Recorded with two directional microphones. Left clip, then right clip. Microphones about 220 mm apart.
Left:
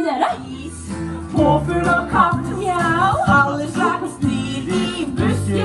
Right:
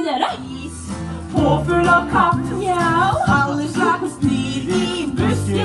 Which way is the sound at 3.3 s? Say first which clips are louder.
Left 3 dB; 25° left (ahead or behind).